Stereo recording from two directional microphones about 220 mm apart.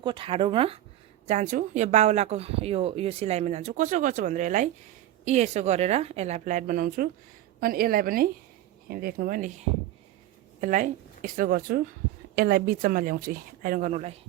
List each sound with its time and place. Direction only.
0.0 s a woman's voice: 25° right (ahead or behind); by 9.5 s 40° right (ahead or behind)
10.6 s a woman's voice: 35° right (ahead or behind)